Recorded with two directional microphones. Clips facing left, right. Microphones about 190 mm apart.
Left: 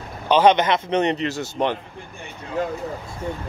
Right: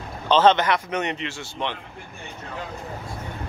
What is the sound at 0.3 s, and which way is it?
Speech, 15° left (ahead or behind).